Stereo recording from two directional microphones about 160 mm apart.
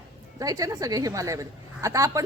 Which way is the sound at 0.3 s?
20° right (ahead or behind).